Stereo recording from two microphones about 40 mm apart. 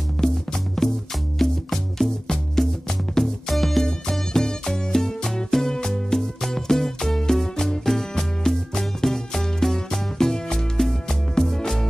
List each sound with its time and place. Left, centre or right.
0.2 s music: centre